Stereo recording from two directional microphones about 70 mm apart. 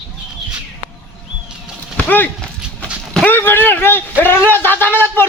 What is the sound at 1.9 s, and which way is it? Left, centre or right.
Clip-clop, left.